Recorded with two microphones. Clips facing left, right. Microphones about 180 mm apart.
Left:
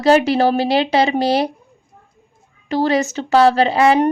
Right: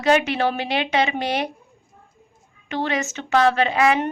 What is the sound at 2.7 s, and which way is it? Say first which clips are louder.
Speech: left 8 dB; 35° left (ahead or behind).